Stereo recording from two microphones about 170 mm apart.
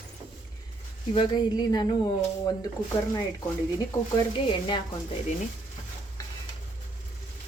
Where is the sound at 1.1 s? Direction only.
25° left (ahead or behind).